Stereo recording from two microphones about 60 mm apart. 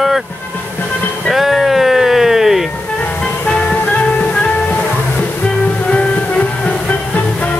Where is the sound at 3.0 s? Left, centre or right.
Centre.